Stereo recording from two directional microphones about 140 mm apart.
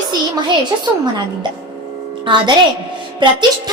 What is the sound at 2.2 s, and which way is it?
A woman's voice, 35° right (ahead or behind).